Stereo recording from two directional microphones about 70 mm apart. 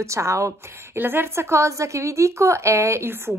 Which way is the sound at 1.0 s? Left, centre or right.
Right.